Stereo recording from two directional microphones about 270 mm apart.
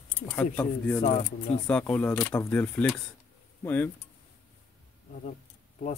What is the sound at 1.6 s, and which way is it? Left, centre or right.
Speech, centre.